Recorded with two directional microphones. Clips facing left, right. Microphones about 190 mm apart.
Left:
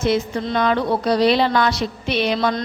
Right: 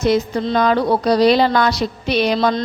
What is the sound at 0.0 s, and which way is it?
A woman's voice, 35° right (ahead or behind).